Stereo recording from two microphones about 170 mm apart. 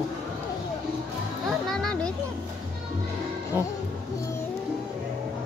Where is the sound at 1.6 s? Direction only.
5° left (ahead or behind).